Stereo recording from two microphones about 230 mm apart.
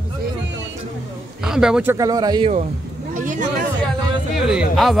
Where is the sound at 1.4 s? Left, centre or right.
Centre.